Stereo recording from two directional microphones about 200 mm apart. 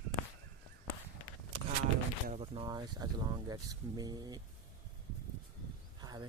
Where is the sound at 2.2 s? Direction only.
30° right (ahead or behind).